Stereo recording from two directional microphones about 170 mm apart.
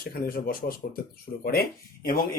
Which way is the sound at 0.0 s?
60° left (ahead or behind).